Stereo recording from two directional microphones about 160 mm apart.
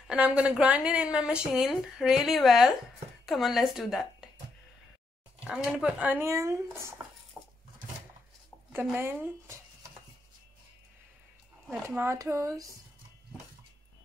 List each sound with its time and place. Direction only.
0.1 s speech: 5° right (ahead or behind)
5.4 s speech: 5° right (ahead or behind)
8.9 s speech: 10° right (ahead or behind)
11.9 s speech: 15° right (ahead or behind)